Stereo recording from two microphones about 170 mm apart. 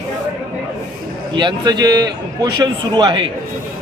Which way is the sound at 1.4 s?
30° right (ahead or behind).